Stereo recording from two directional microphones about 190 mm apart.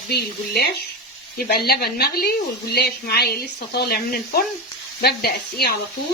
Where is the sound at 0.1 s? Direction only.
55° left (ahead or behind).